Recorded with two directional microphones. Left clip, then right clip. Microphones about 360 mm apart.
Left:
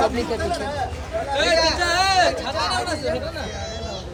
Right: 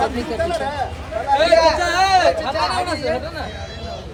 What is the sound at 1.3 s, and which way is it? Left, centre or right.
A man's voice, centre.